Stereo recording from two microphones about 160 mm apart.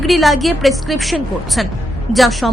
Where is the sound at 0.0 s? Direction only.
Centre (ahead or behind).